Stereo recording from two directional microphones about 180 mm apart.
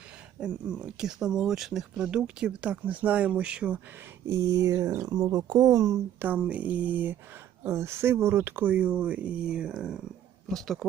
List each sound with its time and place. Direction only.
0.3 s speech: 5° right (ahead or behind)